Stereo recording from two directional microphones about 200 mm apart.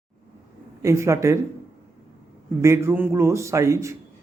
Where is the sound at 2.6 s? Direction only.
15° right (ahead or behind).